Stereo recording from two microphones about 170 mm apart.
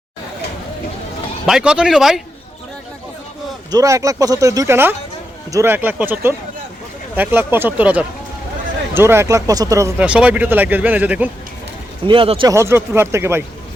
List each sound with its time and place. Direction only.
1.5 s speech: 5° right (ahead or behind)
3.7 s speech: 20° right (ahead or behind)
10.0 s speech: 5° right (ahead or behind)
12.0 s speech: 30° right (ahead or behind)
12.5 s speech: 15° right (ahead or behind)